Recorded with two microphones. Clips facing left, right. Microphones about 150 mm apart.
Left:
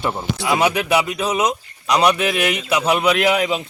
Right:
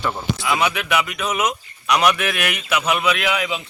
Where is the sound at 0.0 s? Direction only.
20° left (ahead or behind).